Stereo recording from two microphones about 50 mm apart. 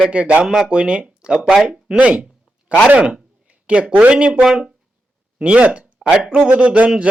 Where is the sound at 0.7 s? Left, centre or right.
Centre.